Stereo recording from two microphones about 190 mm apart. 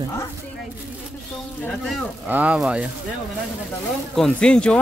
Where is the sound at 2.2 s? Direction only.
10° right (ahead or behind).